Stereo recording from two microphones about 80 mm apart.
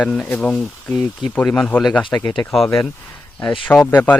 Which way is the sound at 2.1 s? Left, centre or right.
Left.